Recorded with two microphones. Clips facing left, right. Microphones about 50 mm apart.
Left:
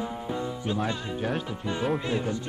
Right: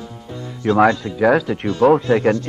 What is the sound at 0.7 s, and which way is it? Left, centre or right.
Speech, right.